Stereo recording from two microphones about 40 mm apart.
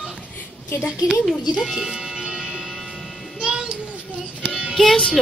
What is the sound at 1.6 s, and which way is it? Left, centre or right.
Music, centre.